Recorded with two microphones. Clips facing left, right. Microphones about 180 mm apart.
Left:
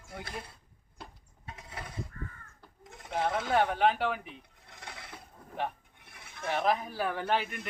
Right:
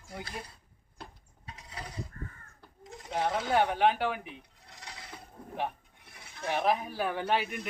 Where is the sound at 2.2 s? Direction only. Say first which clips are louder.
Left 1 dB; 40° right (ahead or behind).